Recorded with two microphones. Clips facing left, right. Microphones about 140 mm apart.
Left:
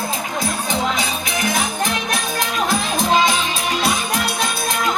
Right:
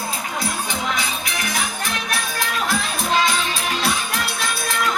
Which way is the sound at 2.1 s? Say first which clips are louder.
Left 3 dB; 20° left (ahead or behind).